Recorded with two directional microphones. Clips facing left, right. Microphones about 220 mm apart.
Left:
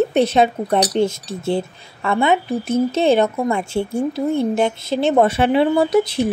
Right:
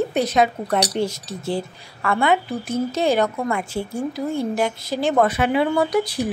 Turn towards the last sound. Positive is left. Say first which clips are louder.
# left 4 dB
turn(degrees=25)  # may be behind; listen again after turning